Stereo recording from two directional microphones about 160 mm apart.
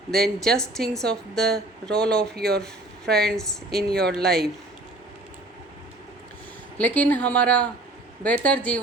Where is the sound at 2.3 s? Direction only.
75° right (ahead or behind).